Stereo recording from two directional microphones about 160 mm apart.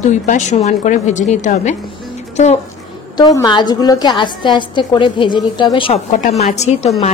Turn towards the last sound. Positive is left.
turn(degrees=45)  # may be behind; listen again after turning